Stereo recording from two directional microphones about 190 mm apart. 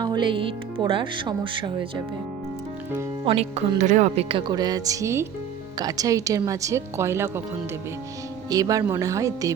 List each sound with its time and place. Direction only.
0.0 s speech: 25° right (ahead or behind)
3.2 s speech: 30° right (ahead or behind); by 7.4 s 15° right (ahead or behind)
8.4 s speech: 20° right (ahead or behind)